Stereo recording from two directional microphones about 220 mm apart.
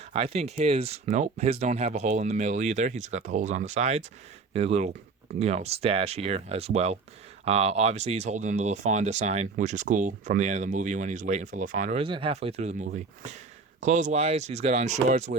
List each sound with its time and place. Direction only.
0.1 s speech: 30° right (ahead or behind)
12.0 s speech: 25° right (ahead or behind)